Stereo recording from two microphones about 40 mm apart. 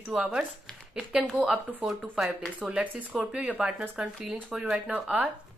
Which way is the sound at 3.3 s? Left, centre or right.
Right.